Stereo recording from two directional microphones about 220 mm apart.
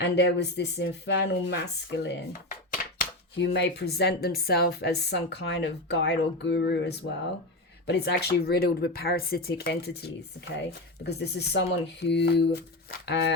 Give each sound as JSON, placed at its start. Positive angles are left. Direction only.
{"t": 0.0, "sound": "speech", "side_deg": 50}